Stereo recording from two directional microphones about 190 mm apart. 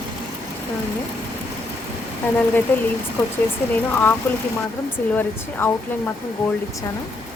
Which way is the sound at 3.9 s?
10° left (ahead or behind).